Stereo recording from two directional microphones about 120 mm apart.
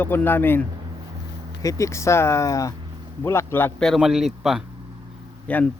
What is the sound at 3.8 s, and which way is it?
Speech, centre (ahead or behind).